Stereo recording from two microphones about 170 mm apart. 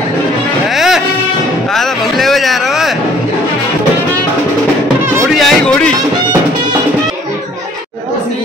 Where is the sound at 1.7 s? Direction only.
Centre (ahead or behind).